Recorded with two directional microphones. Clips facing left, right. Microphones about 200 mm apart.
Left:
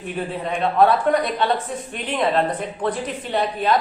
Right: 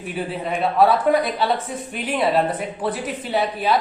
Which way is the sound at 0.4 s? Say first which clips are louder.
Even; 5° right (ahead or behind).